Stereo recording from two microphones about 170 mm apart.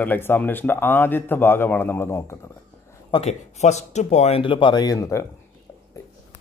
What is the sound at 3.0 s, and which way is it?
Speech, 35° left (ahead or behind).